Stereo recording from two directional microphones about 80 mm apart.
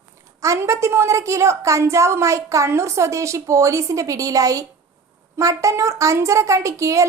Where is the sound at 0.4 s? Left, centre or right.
Right.